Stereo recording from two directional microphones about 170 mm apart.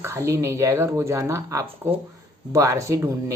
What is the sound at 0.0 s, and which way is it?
Speech, 15° right (ahead or behind).